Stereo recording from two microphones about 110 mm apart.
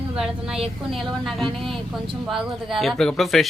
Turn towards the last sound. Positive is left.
turn(degrees=0)  # may be behind; listen again after turning